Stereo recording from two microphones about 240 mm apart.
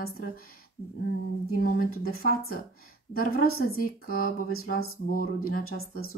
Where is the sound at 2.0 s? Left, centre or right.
Left.